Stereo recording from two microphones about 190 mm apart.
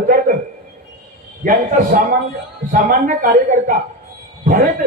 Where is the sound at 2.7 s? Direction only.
45° right (ahead or behind).